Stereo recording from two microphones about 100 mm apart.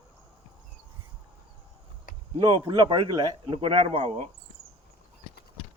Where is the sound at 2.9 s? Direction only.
50° right (ahead or behind); by 4.3 s 90° right.